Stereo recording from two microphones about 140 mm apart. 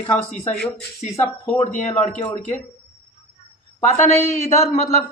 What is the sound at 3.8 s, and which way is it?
Speech, 55° left (ahead or behind).